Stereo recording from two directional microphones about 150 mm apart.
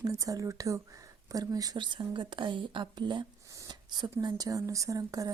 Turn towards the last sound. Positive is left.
turn(degrees=-20)  # may be behind; listen again after turning